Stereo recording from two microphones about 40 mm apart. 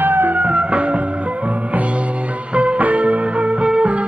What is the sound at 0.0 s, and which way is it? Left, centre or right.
Music, right.